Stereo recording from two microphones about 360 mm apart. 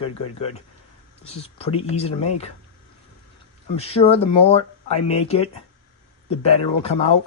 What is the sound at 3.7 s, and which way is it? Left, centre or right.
Speech, centre.